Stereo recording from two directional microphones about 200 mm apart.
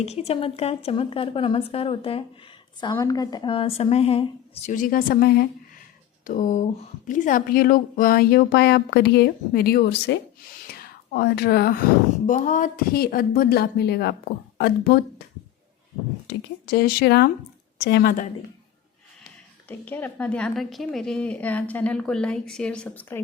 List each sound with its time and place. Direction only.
0.0 s a woman's voice: 30° left (ahead or behind); by 5.8 s 50° left (ahead or behind)
6.2 s a woman's voice: 40° left (ahead or behind)
16.2 s speech: 50° left (ahead or behind)
19.6 s a woman's voice: 10° left (ahead or behind)